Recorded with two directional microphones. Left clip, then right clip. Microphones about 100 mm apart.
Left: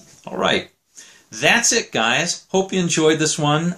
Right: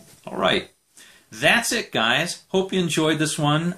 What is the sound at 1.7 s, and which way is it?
Speech, 15° left (ahead or behind).